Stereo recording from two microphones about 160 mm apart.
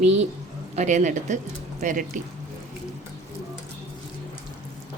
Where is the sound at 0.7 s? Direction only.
50° right (ahead or behind).